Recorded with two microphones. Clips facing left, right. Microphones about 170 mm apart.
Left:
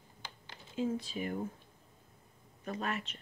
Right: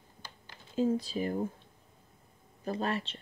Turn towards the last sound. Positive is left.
turn(degrees=-35)  # may be behind; listen again after turning